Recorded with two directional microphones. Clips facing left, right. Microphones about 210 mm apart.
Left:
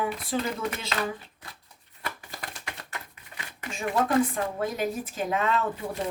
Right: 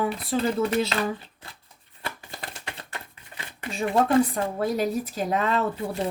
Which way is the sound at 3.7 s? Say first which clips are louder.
Right 4 dB; 30° right (ahead or behind).